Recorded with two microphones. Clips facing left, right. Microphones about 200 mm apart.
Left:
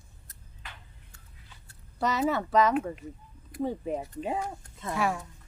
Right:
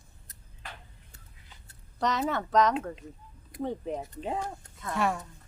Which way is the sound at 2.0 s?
5° left (ahead or behind).